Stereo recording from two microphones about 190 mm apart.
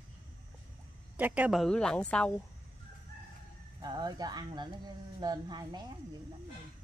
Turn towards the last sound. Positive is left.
turn(degrees=-20)  # may be behind; listen again after turning